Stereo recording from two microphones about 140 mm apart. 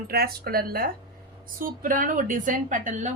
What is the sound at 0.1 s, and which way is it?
Speech, 90° right.